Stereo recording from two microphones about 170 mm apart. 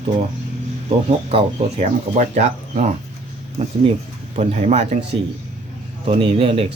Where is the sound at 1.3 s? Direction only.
40° right (ahead or behind).